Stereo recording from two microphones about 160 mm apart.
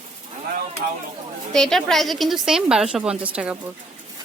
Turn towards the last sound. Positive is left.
turn(degrees=-10)  # may be behind; listen again after turning